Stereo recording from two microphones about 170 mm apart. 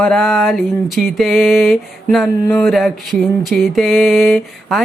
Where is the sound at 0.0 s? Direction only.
5° left (ahead or behind).